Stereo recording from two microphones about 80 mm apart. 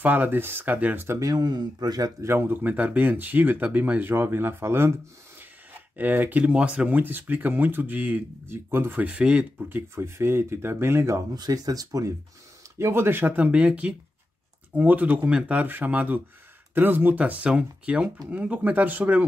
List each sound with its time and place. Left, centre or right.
0.0 s speech: right
1.2 s speech: right
2.2 s speech: right
9.0 s speech: centre
9.7 s speech: right
11.3 s speech: right
12.7 s speech: right
13.5 s speech: centre